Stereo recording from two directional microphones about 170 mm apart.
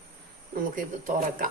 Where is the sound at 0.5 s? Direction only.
55° right (ahead or behind).